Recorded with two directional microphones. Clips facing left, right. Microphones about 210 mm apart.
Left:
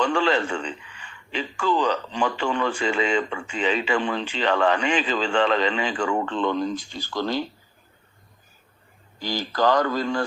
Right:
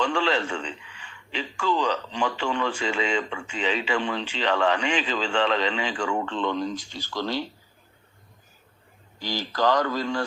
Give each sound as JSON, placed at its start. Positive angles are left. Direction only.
{"t": 0.0, "sound": "a man's voice", "side_deg": 50}
{"t": 9.2, "sound": "a man's voice", "side_deg": 50}